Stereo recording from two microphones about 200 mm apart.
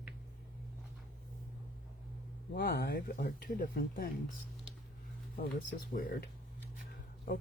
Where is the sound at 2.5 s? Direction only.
50° left (ahead or behind).